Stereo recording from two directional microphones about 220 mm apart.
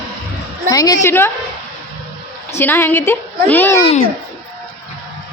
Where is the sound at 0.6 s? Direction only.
15° left (ahead or behind).